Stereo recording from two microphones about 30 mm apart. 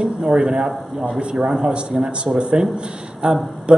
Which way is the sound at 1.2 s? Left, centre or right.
Right.